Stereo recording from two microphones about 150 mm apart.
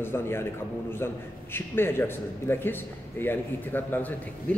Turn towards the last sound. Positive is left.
turn(degrees=10)  # may be behind; listen again after turning